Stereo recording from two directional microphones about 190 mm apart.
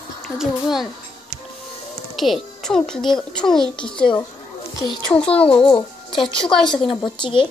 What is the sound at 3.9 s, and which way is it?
Speech, 25° left (ahead or behind).